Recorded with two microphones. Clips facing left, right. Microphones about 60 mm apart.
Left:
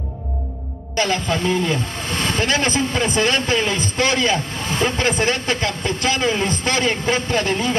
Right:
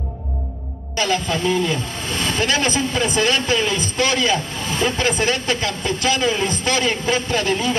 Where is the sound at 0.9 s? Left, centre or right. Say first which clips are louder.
Even; left.